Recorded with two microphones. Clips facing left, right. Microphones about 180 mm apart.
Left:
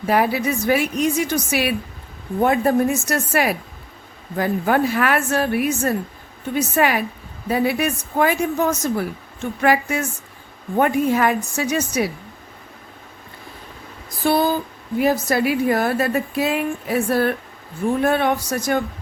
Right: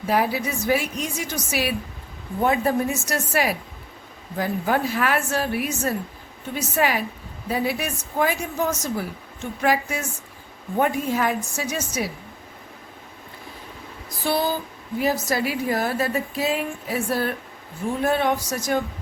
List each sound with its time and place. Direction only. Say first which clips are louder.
0.0 s speech: left 4 dB; 65° left (ahead or behind)
14.3 s a sound: left 5 dB; 55° left (ahead or behind)
14.9 s speech: left 4 dB; 60° left (ahead or behind)